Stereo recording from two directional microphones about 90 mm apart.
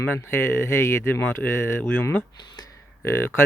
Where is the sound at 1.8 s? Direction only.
15° left (ahead or behind).